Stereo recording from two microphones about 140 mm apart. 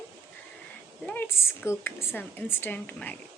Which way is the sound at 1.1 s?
15° left (ahead or behind).